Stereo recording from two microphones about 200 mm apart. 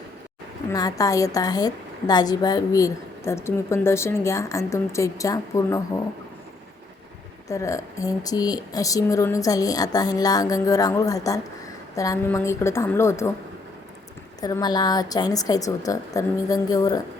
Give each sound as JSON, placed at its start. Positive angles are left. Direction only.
{"t": 0.7, "sound": "a woman's voice", "side_deg": 15}
{"t": 7.4, "sound": "a woman's voice", "side_deg": 15}
{"t": 14.4, "sound": "a woman's voice", "side_deg": 20}